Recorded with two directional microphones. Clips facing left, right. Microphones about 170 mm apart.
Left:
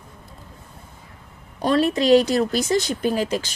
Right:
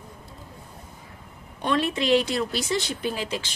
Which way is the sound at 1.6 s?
35° left (ahead or behind).